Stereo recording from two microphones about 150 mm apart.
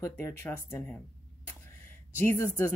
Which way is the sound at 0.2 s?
15° left (ahead or behind).